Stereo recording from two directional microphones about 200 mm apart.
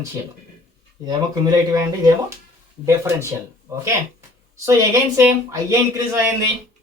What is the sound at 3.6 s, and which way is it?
Speech, 15° right (ahead or behind).